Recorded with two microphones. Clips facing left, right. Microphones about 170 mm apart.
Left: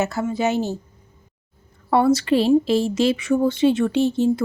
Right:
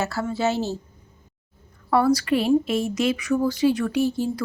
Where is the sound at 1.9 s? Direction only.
25° left (ahead or behind).